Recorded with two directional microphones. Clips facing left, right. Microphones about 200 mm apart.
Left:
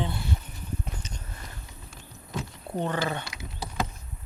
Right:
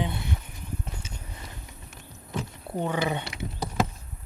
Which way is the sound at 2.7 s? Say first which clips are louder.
Right 1 dB; 10° right (ahead or behind).